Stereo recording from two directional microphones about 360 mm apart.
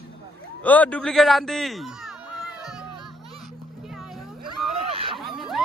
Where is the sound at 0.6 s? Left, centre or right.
Centre.